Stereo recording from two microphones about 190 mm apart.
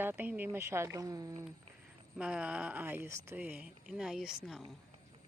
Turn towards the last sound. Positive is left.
turn(degrees=0)  # may be behind; listen again after turning